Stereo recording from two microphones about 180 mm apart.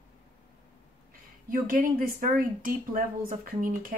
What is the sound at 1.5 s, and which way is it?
A woman's voice, 50° right (ahead or behind).